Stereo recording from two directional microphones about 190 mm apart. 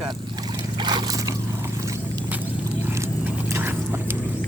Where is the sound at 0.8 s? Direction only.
25° right (ahead or behind).